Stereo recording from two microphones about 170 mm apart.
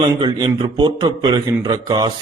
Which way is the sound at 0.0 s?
25° right (ahead or behind).